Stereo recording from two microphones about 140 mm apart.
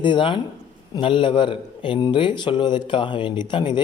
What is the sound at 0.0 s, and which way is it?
Speech, 35° left (ahead or behind).